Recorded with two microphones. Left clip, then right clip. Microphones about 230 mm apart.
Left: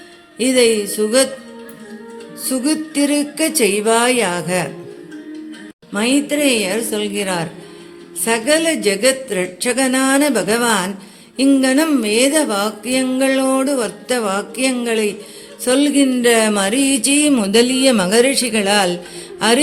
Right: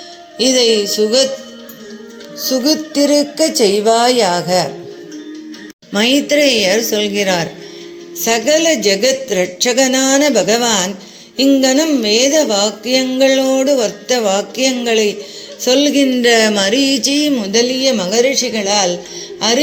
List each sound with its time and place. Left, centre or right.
0.3 s music: centre
2.4 s music: centre
5.9 s music: centre
15.6 s speech: centre
19.4 s music: centre